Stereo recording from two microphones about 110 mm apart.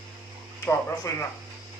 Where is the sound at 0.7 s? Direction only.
25° left (ahead or behind).